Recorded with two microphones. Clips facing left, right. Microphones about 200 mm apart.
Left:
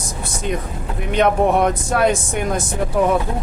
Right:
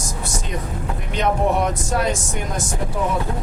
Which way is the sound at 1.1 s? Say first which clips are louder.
Left 4 dB; 60° left (ahead or behind).